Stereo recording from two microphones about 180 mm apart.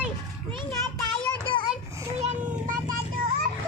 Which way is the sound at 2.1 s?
40° right (ahead or behind).